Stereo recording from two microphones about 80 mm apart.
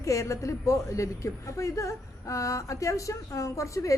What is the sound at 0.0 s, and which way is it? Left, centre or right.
A woman's voice, left.